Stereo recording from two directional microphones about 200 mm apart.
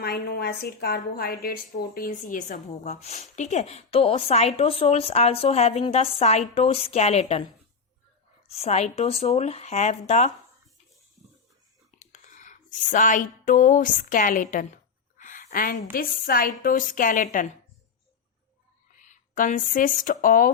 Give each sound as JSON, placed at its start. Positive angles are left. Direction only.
{"t": 0.0, "sound": "a woman's voice", "side_deg": 50}
{"t": 8.4, "sound": "a woman's voice", "side_deg": 30}
{"t": 11.9, "sound": "speech", "side_deg": 40}
{"t": 15.2, "sound": "a sound", "side_deg": 40}
{"t": 15.9, "sound": "a woman's voice", "side_deg": 45}
{"t": 18.9, "sound": "speech", "side_deg": 40}